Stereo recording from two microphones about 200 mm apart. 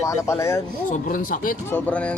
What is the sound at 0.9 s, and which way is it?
Speech, 45° left (ahead or behind).